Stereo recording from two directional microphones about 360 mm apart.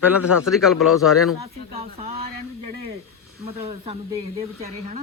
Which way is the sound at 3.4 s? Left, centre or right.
Centre.